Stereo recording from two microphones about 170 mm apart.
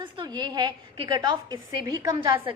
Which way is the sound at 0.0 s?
25° right (ahead or behind).